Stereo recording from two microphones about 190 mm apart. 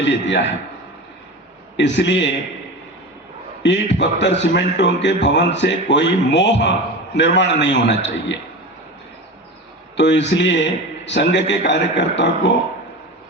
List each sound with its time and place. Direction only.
0.0 s a man's voice: 65° left (ahead or behind)
1.7 s a man's voice: 70° left (ahead or behind)
3.6 s a man's voice: 70° left (ahead or behind)
10.0 s a man's voice: 70° left (ahead or behind)